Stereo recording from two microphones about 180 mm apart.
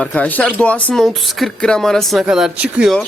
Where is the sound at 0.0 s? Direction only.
10° left (ahead or behind).